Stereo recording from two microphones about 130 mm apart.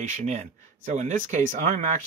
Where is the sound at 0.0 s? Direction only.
65° right (ahead or behind).